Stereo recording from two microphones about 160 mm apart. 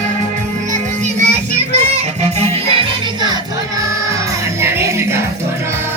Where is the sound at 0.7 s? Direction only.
50° right (ahead or behind).